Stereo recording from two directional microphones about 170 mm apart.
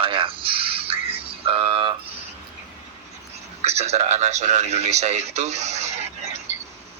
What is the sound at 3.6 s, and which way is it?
A man's voice, 40° right (ahead or behind).